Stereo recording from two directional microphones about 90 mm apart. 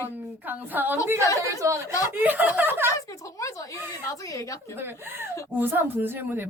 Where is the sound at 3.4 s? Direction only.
35° left (ahead or behind).